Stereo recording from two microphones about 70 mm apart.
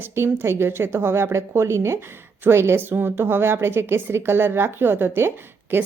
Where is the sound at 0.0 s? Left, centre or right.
Right.